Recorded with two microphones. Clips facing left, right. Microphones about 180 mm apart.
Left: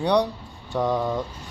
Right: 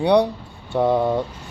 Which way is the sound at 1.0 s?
25° right (ahead or behind).